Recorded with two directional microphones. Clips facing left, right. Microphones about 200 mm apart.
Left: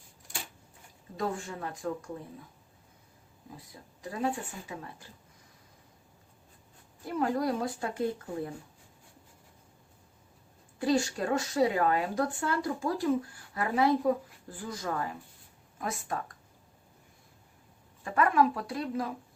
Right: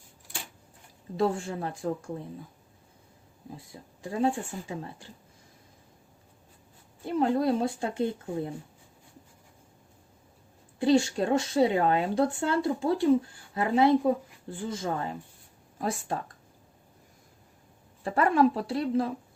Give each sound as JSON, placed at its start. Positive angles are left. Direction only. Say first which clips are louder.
{"t": 1.1, "sound": "speech", "louder": "right 6 dB", "side_deg": -30}
{"t": 3.7, "sound": "speech", "louder": "right 5 dB", "side_deg": -30}
{"t": 7.0, "sound": "speech", "louder": "right 4 dB", "side_deg": -25}
{"t": 10.8, "sound": "speech", "louder": "right 5 dB", "side_deg": -25}
{"t": 18.0, "sound": "speech", "louder": "right 3 dB", "side_deg": -30}